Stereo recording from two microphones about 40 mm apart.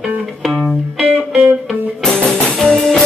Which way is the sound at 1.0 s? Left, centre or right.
Centre.